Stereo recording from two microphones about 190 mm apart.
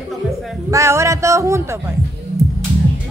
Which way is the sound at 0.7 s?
15° right (ahead or behind).